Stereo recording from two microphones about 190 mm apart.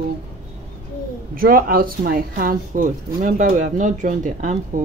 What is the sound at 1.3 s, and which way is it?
Speech, 50° right (ahead or behind).